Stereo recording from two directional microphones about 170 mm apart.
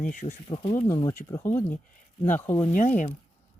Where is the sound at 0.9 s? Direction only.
20° left (ahead or behind).